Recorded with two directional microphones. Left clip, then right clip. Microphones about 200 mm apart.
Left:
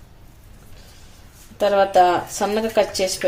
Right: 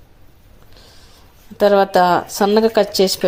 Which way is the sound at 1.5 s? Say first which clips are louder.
Right 3 dB; 40° right (ahead or behind).